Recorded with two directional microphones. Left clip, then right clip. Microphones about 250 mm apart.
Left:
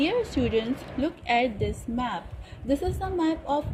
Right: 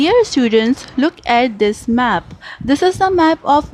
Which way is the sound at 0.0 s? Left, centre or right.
Right.